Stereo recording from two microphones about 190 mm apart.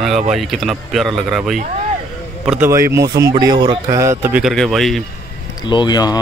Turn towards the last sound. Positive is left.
turn(degrees=20)  # may be behind; listen again after turning